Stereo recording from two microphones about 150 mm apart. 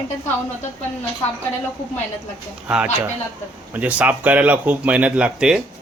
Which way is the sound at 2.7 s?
5° right (ahead or behind).